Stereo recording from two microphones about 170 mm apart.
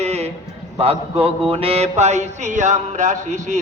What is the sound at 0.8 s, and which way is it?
A man's voice, 35° right (ahead or behind).